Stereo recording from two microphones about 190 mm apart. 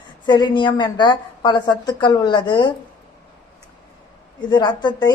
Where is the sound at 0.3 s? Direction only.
25° left (ahead or behind).